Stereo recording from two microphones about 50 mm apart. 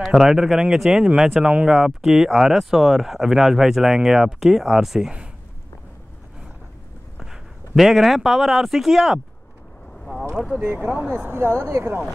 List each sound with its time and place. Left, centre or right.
0.0 s speech: centre
7.2 s a man's voice: centre
10.6 s speech: right
11.2 s speech: right